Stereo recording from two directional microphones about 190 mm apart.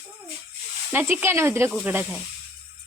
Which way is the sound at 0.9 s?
10° right (ahead or behind).